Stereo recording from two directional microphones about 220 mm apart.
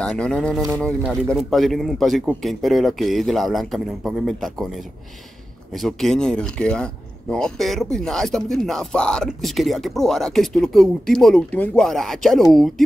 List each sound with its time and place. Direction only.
0.0 s speech: 5° left (ahead or behind)